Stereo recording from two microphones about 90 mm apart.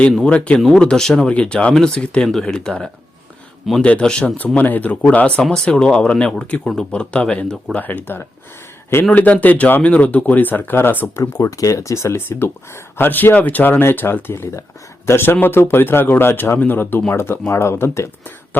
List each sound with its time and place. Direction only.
0.3 s speech: 15° left (ahead or behind)
11.2 s speech: 40° left (ahead or behind)